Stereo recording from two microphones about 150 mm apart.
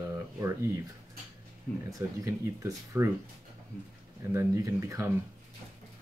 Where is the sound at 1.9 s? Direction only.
20° right (ahead or behind).